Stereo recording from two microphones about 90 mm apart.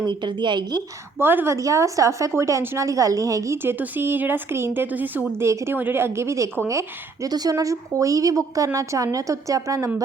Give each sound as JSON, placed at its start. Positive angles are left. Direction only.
{"t": 0.0, "sound": "speech", "side_deg": -60}
{"t": 1.2, "sound": "speech", "side_deg": -25}
{"t": 1.5, "sound": "a woman's voice", "side_deg": -35}
{"t": 3.6, "sound": "speech", "side_deg": -25}
{"t": 5.4, "sound": "a woman's voice", "side_deg": -30}